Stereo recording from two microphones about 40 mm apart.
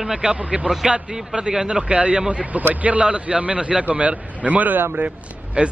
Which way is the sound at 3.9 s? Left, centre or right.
Right.